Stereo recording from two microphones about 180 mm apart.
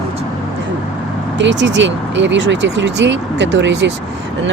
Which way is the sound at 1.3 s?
90° right.